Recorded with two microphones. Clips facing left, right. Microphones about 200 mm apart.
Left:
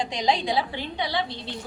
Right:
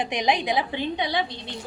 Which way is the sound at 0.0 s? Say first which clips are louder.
Right 1 dB; 20° right (ahead or behind).